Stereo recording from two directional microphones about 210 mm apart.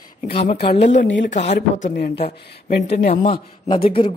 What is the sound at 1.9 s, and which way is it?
Speech, 50° left (ahead or behind).